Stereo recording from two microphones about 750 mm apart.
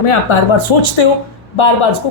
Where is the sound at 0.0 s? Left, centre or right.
Left.